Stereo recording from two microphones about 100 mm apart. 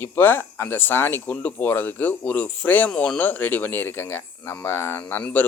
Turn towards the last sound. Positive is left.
turn(degrees=20)  # may be behind; listen again after turning